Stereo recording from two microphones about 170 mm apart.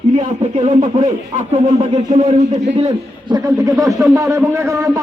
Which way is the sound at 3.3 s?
20° right (ahead or behind).